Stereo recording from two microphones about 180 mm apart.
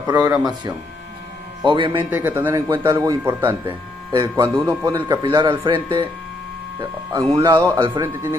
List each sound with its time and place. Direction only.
0.0 s speech: 20° right (ahead or behind)
1.6 s speech: 25° right (ahead or behind)
2.0 s speech: 10° right (ahead or behind); by 6.0 s 25° right (ahead or behind)
7.3 s speech: 15° right (ahead or behind)